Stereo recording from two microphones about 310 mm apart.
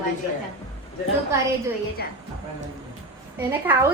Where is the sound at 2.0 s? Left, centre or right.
Left.